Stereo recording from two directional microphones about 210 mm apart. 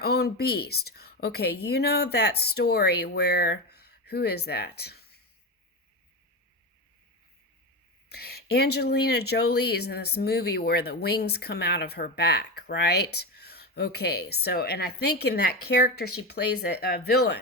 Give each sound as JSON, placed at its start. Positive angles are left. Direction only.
{"t": 0.0, "sound": "a woman's voice", "side_deg": 50}
{"t": 8.1, "sound": "a woman's voice", "side_deg": 50}